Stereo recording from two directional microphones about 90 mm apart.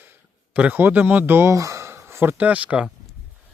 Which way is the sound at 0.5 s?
15° right (ahead or behind).